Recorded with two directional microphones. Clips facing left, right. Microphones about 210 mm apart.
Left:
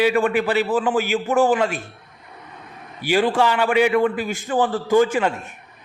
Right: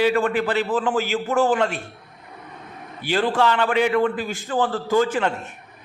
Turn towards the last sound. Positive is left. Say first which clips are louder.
# left 3 dB
turn(degrees=10)  # may be behind; listen again after turning